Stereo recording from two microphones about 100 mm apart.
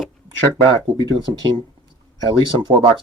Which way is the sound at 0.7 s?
50° right (ahead or behind).